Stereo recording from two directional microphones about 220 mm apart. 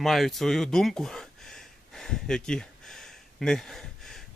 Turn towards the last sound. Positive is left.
turn(degrees=0)  # may be behind; listen again after turning